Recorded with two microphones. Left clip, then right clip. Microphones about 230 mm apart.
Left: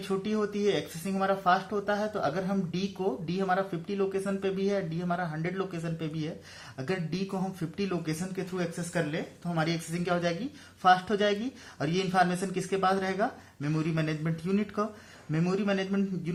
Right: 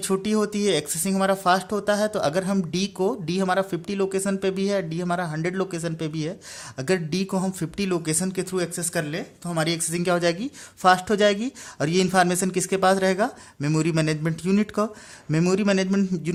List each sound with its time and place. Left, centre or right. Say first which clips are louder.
0.1 s speech: right 6 dB; right